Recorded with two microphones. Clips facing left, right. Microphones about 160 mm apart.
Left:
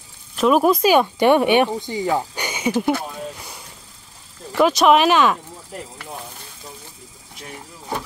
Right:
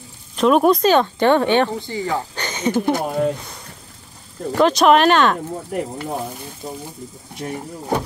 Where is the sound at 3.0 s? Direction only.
70° right (ahead or behind).